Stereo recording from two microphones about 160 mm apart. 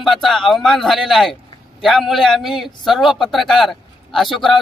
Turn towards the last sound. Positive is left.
turn(degrees=0)  # may be behind; listen again after turning